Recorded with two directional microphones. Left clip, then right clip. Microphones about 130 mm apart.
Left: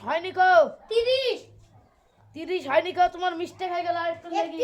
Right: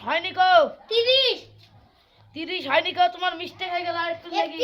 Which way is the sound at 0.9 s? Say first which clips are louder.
Right 4 dB; 20° left (ahead or behind).